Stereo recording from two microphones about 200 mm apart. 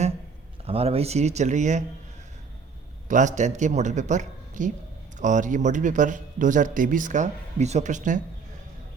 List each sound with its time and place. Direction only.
0.6 s a man's voice: 30° right (ahead or behind)
3.1 s a man's voice: 40° right (ahead or behind)